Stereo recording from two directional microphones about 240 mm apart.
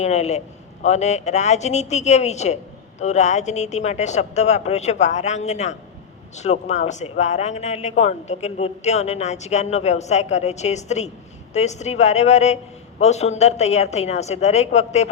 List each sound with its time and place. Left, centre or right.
0.0 s speech: left